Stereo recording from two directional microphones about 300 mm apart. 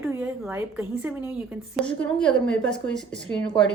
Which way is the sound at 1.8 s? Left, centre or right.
Centre.